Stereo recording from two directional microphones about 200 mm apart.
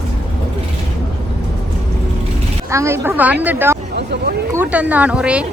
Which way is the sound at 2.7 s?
15° right (ahead or behind).